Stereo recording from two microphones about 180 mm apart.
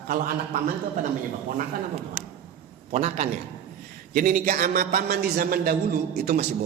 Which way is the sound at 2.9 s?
40° right (ahead or behind).